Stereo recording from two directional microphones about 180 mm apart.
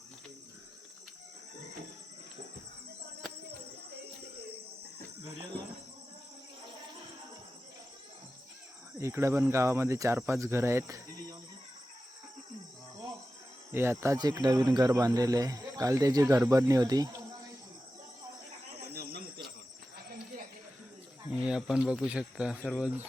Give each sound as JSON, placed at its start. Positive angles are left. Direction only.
{"t": 9.0, "sound": "speech", "side_deg": -15}
{"t": 13.7, "sound": "speech", "side_deg": -15}
{"t": 18.9, "sound": "a sound", "side_deg": -60}
{"t": 21.2, "sound": "speech", "side_deg": -5}